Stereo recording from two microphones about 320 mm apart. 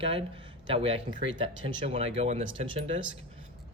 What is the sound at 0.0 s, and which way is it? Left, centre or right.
Speech, centre.